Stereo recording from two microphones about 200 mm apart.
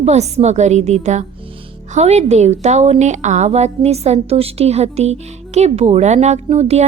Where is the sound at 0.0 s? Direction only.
35° right (ahead or behind).